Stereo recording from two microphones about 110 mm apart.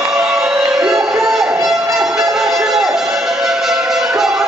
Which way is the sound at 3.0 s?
Centre (ahead or behind).